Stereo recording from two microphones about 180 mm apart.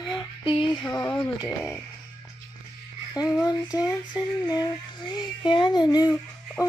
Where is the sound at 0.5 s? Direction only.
25° left (ahead or behind).